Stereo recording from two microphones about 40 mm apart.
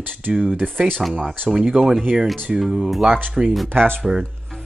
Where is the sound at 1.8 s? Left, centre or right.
Right.